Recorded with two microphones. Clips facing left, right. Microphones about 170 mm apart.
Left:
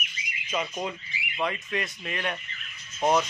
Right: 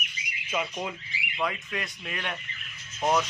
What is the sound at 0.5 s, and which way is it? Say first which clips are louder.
Speech: left 1 dB; 5° right (ahead or behind).